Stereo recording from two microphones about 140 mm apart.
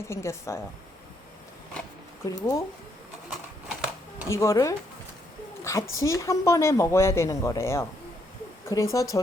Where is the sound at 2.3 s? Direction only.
25° left (ahead or behind).